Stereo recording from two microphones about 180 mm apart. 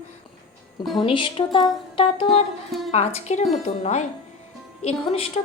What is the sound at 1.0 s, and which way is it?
A woman's voice, 25° left (ahead or behind).